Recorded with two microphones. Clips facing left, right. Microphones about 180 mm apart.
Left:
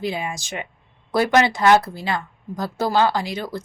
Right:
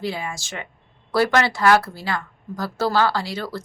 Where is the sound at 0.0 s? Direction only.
20° left (ahead or behind).